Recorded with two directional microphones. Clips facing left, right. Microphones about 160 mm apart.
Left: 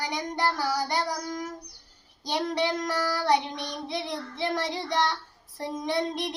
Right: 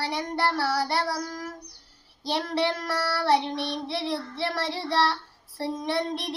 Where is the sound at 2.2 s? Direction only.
20° left (ahead or behind).